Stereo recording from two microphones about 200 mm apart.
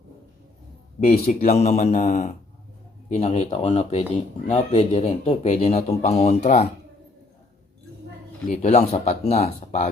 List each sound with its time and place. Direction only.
0.9 s speech: 35° left (ahead or behind)
8.4 s speech: 35° left (ahead or behind)